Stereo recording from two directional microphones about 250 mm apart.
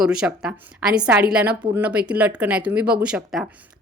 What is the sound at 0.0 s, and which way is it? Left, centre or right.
Speech, centre.